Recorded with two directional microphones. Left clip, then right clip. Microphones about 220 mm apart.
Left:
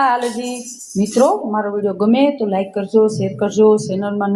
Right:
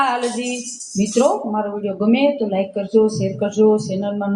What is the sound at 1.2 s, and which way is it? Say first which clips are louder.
Speech: left 3 dB; 25° left (ahead or behind).